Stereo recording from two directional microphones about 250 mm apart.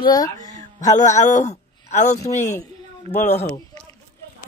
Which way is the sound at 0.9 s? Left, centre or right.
Left.